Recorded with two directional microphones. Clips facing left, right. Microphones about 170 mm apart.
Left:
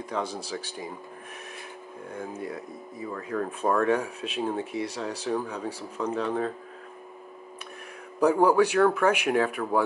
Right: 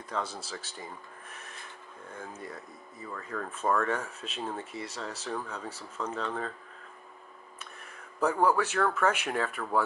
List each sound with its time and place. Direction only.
0.1 s speech: 15° left (ahead or behind)
3.1 s speech: 15° left (ahead or behind)
8.2 s speech: 15° left (ahead or behind)